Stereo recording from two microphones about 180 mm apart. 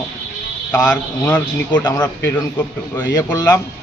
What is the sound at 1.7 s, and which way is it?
A man's voice, 20° left (ahead or behind).